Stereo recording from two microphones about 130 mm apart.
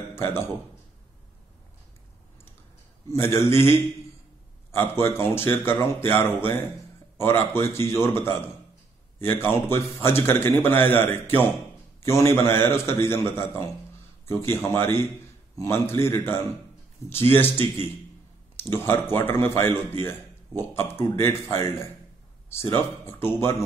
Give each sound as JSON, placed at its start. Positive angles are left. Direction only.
{"t": 0.1, "sound": "a man's voice", "side_deg": 20}
{"t": 3.1, "sound": "a man's voice", "side_deg": 20}